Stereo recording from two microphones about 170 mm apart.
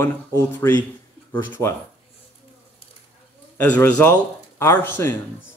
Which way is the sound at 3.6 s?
10° left (ahead or behind).